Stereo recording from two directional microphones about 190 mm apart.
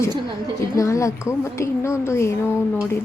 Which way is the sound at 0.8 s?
15° left (ahead or behind).